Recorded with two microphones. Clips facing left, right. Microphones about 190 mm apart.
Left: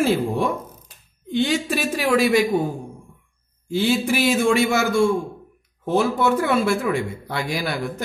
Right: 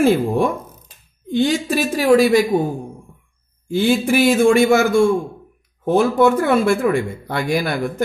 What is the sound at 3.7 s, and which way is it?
A man's voice, 50° right (ahead or behind).